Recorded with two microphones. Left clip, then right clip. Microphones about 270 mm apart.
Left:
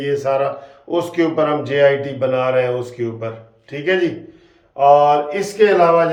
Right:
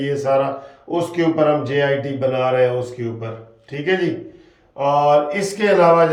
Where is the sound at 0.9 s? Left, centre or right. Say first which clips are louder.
Left 1 dB; centre.